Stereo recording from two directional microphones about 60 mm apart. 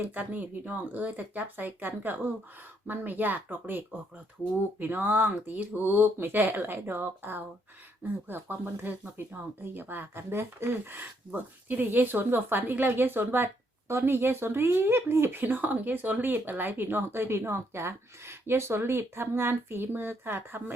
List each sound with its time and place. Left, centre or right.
0.0 s speech: right